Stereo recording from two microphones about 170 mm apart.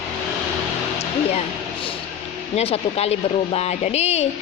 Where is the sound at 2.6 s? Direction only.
35° left (ahead or behind).